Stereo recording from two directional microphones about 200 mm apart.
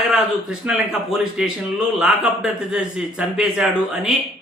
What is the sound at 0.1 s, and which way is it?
A man's voice, 5° right (ahead or behind).